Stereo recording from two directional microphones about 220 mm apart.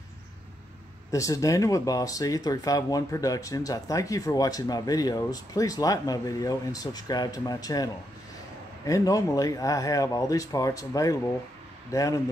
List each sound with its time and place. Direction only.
1.1 s speech: 15° left (ahead or behind)